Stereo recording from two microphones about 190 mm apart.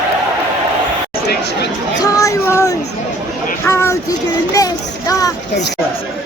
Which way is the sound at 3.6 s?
15° left (ahead or behind).